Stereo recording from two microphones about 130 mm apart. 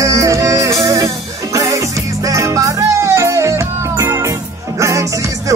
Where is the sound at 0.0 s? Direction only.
25° right (ahead or behind).